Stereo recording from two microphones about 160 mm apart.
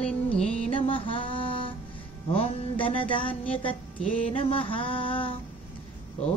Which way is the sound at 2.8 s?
35° left (ahead or behind).